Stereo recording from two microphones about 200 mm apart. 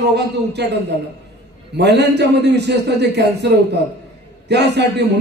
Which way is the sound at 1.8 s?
55° right (ahead or behind).